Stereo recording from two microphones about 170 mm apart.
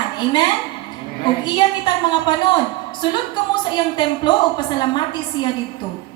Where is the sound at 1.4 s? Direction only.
25° left (ahead or behind).